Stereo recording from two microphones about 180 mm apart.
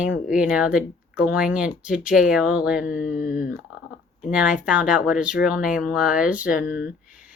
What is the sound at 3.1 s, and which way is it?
Speech, 45° left (ahead or behind).